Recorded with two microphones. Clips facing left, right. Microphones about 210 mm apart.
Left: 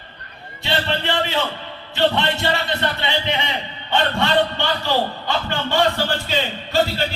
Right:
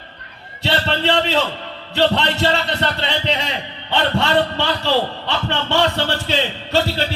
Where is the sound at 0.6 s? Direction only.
65° right (ahead or behind).